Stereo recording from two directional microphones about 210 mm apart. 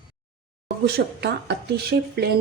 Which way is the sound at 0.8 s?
50° right (ahead or behind).